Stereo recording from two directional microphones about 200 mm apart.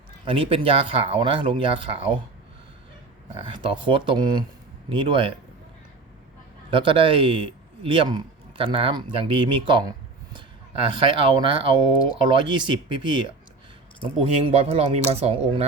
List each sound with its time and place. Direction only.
0.3 s speech: 25° right (ahead or behind)
3.3 s speech: 25° right (ahead or behind)
6.7 s speech: 25° right (ahead or behind)
10.8 s speech: 25° right (ahead or behind)